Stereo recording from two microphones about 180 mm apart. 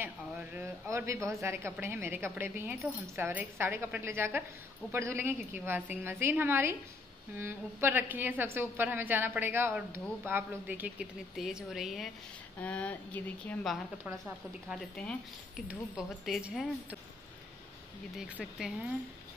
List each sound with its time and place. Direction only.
0.0 s speech: 10° right (ahead or behind)
18.1 s speech: centre (ahead or behind)